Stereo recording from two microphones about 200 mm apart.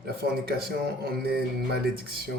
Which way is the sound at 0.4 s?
50° right (ahead or behind).